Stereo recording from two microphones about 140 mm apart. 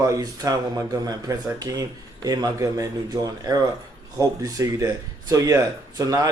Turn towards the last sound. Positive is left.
turn(degrees=-25)  # may be behind; listen again after turning